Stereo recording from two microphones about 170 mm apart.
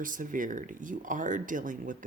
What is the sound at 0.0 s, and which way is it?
Speech, 50° right (ahead or behind).